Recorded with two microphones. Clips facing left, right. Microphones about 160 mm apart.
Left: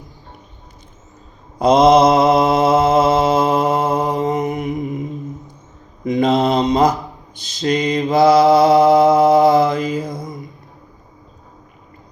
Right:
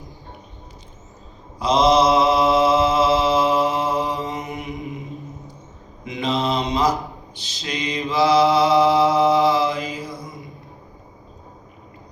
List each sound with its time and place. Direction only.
1.5 s mantra: 50° left (ahead or behind)
6.1 s mantra: 45° left (ahead or behind)